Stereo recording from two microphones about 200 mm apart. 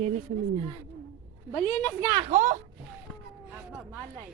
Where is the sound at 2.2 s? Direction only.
40° right (ahead or behind).